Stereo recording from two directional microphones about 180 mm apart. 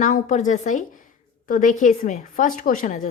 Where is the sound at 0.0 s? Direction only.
45° left (ahead or behind).